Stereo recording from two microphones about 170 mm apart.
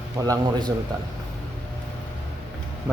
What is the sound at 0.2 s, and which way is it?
Speech, 20° right (ahead or behind).